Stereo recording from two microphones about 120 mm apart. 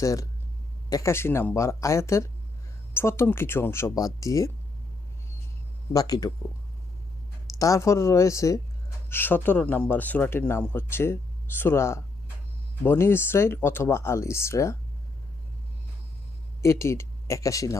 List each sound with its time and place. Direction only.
0.0 s speech: 30° left (ahead or behind)
5.9 s speech: 30° left (ahead or behind)
7.4 s speech: 25° left (ahead or behind)
16.6 s speech: 25° left (ahead or behind)